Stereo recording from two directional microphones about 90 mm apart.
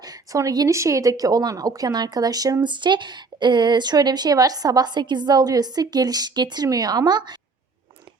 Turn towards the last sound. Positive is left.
turn(degrees=-50)  # may be behind; listen again after turning